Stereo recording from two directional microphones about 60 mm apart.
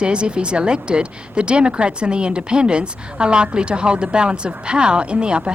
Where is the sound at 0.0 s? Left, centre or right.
Centre.